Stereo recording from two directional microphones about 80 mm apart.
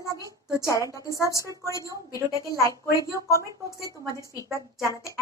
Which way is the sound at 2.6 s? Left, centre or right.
Left.